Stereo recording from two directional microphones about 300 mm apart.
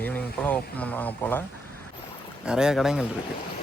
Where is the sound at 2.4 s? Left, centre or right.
Centre.